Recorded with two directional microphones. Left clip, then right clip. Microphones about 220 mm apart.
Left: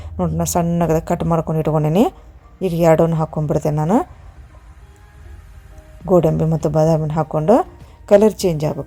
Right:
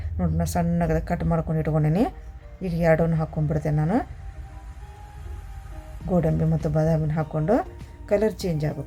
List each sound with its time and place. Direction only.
0.2 s a woman's voice: 25° left (ahead or behind)
6.1 s a woman's voice: 25° left (ahead or behind)